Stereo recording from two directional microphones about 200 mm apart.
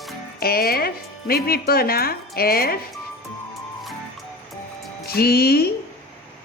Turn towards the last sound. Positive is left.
turn(degrees=50)  # may be behind; listen again after turning